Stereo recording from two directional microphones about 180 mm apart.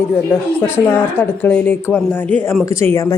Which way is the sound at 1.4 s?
10° left (ahead or behind).